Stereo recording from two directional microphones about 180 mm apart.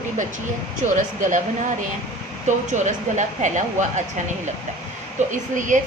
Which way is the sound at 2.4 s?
40° right (ahead or behind).